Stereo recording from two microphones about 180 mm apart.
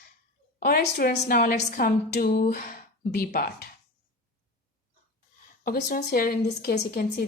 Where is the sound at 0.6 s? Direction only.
55° left (ahead or behind).